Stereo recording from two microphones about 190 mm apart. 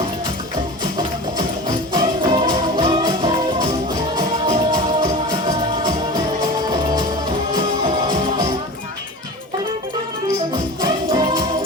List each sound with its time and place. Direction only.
1.6 s music: 25° right (ahead or behind)
8.0 s music: 20° right (ahead or behind)
10.8 s music: 20° right (ahead or behind)